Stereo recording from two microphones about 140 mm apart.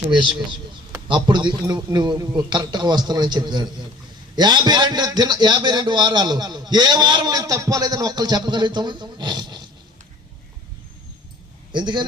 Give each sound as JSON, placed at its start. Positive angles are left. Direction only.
{"t": 0.2, "sound": "a man's voice", "side_deg": -35}
{"t": 11.7, "sound": "a man's voice", "side_deg": -35}